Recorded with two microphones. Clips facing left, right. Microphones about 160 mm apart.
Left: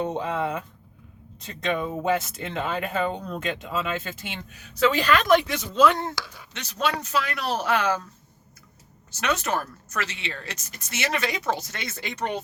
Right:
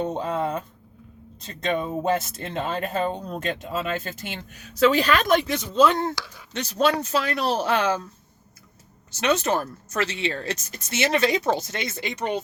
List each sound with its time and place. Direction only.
0.2 s a sound: 35° right (ahead or behind)
1.6 s speech: 40° right (ahead or behind)
5.7 s speech: 25° right (ahead or behind)
9.2 s speech: 25° right (ahead or behind)
11.9 s speech: 15° right (ahead or behind)